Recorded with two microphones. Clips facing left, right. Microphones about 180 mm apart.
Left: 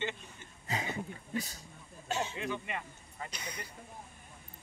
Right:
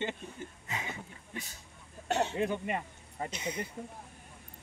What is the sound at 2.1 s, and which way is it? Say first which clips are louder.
Speech: right 5 dB; 65° right (ahead or behind).